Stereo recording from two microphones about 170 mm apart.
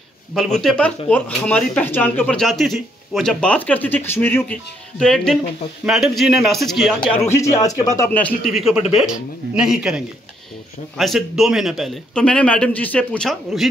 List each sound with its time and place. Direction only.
0.3 s speech: centre (ahead or behind)
7.2 s speech: 15° left (ahead or behind)
8.5 s speech: 5° right (ahead or behind)